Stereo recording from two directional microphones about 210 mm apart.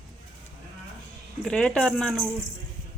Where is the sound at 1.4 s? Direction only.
5° left (ahead or behind).